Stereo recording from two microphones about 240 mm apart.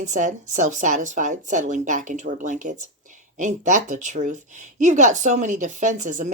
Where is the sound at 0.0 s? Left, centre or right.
Right.